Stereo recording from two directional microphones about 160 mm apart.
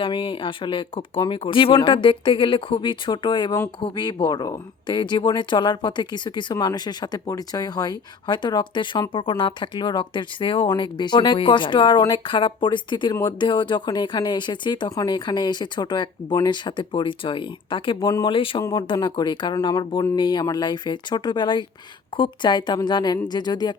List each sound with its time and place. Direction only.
0.0 s speech: 30° left (ahead or behind)